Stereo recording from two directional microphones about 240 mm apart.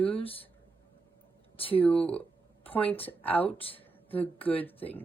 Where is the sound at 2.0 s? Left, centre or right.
Centre.